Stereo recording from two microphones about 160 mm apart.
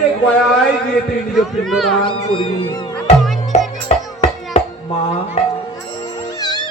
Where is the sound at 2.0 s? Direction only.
30° left (ahead or behind).